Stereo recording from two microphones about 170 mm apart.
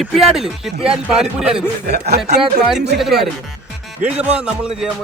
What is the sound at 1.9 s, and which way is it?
Speech, 70° right (ahead or behind).